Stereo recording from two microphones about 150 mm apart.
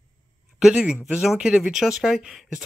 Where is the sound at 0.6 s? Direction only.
5° right (ahead or behind).